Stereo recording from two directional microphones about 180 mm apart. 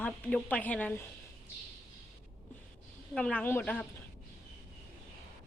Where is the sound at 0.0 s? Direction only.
5° left (ahead or behind).